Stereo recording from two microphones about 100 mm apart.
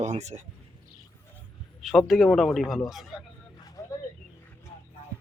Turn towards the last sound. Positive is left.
turn(degrees=30)  # may be behind; listen again after turning